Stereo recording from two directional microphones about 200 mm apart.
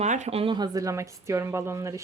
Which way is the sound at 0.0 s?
35° right (ahead or behind).